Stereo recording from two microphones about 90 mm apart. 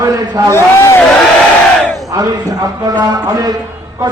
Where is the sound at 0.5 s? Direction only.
30° left (ahead or behind).